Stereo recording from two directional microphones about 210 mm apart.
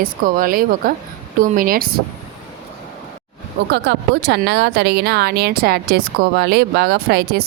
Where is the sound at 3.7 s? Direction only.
50° right (ahead or behind).